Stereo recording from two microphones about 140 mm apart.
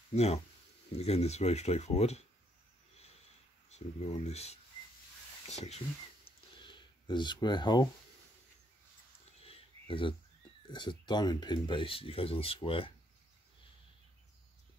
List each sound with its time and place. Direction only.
0.1 s speech: 50° left (ahead or behind)
3.7 s speech: 50° left (ahead or behind)
6.6 s speech: 35° left (ahead or behind)
9.4 s a sound: 40° left (ahead or behind)
10.7 s speech: 35° left (ahead or behind)